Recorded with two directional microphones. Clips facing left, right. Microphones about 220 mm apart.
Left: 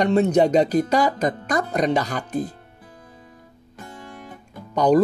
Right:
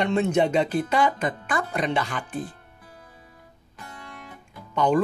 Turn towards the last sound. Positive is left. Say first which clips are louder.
# left 5 dB
turn(degrees=40)  # may be behind; listen again after turning